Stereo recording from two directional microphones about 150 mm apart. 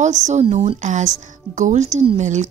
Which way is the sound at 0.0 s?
50° right (ahead or behind).